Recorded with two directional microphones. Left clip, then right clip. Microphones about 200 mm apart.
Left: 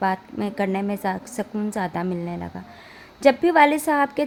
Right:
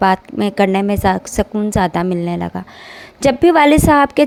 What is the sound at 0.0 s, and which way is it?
A woman's voice, 35° right (ahead or behind).